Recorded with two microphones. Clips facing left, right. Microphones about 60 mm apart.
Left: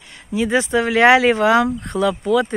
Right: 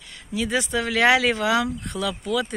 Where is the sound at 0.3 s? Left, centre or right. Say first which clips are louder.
Left 6 dB; left.